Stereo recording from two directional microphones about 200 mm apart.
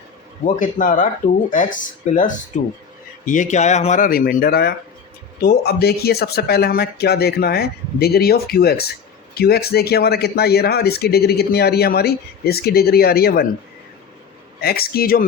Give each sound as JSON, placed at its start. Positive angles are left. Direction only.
{"t": 0.4, "sound": "speech", "side_deg": 40}
{"t": 14.6, "sound": "speech", "side_deg": 50}